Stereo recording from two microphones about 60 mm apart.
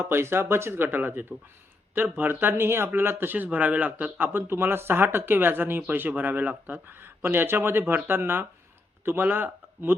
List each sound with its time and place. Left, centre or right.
0.0 s speech: right